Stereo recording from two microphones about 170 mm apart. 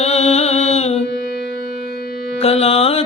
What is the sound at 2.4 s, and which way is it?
Music, 35° left (ahead or behind).